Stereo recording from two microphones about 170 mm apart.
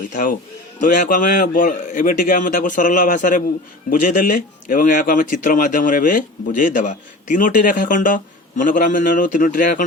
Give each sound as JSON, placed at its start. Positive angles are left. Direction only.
{"t": 0.1, "sound": "a man's voice", "side_deg": 50}